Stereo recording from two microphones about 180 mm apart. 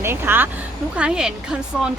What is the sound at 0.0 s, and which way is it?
A woman's voice, 15° right (ahead or behind).